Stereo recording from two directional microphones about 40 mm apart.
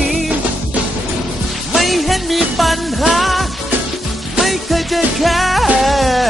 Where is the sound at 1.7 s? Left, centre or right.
Centre.